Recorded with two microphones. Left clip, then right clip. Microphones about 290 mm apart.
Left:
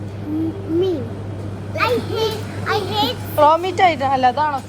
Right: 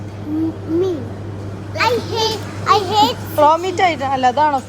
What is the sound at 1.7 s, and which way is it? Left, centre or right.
Speech, right.